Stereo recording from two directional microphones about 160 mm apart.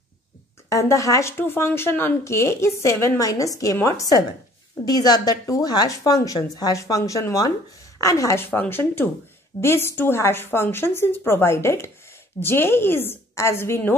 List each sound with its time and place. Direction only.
0.7 s speech: 20° left (ahead or behind)